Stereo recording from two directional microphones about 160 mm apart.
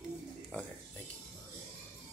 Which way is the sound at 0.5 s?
10° left (ahead or behind).